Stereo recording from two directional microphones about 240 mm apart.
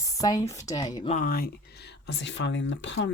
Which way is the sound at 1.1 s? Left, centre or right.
Left.